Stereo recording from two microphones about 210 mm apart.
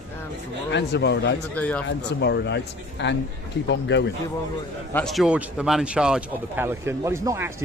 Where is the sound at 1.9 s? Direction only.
55° left (ahead or behind).